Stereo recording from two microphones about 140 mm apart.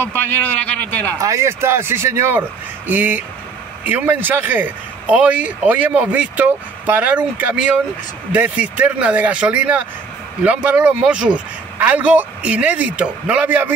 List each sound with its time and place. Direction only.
0.1 s a man's voice: 10° left (ahead or behind)
1.2 s speech: 20° right (ahead or behind)